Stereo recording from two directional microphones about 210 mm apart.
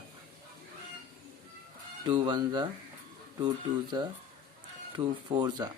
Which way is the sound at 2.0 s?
20° right (ahead or behind).